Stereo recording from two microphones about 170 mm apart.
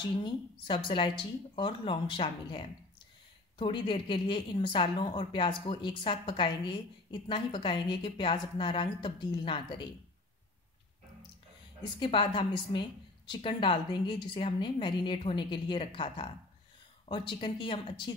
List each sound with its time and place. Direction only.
0.0 s a woman's voice: 30° left (ahead or behind)
12.0 s a woman's voice: 30° left (ahead or behind)